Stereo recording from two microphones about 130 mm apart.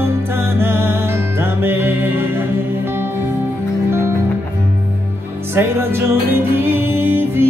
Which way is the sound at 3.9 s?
20° right (ahead or behind).